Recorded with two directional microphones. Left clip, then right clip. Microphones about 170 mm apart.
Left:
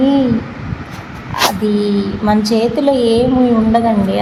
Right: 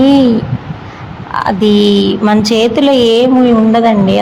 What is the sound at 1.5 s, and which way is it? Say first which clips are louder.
Speech: right 7 dB; 25° right (ahead or behind).